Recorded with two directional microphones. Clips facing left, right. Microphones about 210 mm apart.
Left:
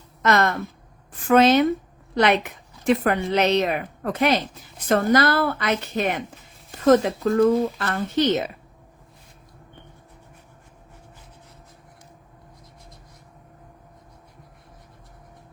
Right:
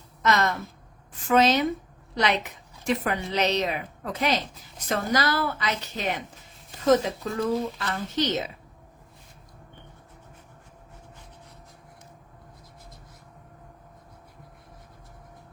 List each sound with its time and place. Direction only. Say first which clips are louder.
0.2 s a woman's voice: left 4 dB; 60° left (ahead or behind)